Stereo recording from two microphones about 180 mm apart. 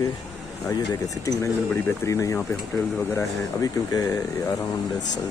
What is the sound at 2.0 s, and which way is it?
Speech, 15° left (ahead or behind).